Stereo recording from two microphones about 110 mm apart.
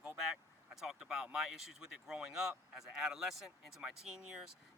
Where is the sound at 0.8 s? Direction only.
5° right (ahead or behind).